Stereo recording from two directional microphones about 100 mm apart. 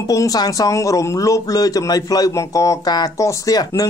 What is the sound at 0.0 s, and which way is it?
Speech, 35° left (ahead or behind).